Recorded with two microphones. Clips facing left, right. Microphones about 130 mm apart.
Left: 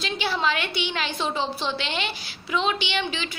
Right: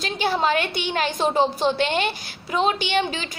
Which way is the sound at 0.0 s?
45° right (ahead or behind).